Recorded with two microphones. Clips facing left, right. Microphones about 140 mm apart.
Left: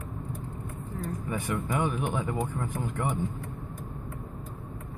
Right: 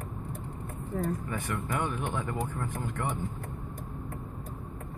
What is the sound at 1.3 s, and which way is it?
Speech, 10° left (ahead or behind).